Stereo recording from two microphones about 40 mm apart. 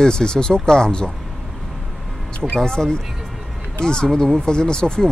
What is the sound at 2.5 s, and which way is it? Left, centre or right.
Speech, centre.